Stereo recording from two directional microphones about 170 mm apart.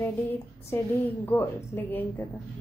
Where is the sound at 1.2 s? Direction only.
10° left (ahead or behind).